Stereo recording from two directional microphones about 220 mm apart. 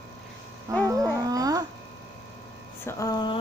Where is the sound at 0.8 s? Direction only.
15° right (ahead or behind).